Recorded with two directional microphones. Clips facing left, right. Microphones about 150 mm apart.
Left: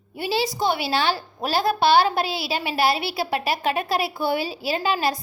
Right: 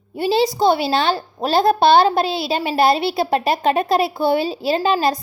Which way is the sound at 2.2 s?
10° left (ahead or behind).